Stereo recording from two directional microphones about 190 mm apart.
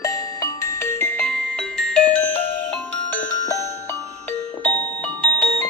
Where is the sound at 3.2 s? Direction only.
40° left (ahead or behind).